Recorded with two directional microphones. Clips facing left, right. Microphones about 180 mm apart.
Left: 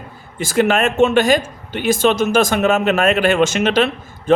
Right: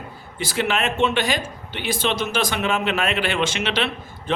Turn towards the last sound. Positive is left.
turn(degrees=45)  # may be behind; listen again after turning